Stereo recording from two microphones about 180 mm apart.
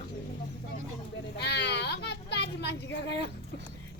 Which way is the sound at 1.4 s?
70° left (ahead or behind).